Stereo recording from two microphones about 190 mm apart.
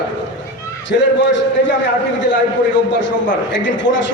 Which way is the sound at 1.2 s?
70° left (ahead or behind).